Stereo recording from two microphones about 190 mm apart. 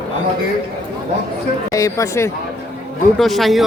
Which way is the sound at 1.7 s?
15° left (ahead or behind).